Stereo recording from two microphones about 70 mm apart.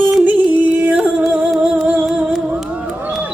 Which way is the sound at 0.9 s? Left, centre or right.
Centre.